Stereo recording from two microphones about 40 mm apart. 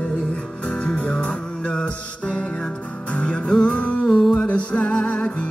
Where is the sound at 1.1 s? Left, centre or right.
Left.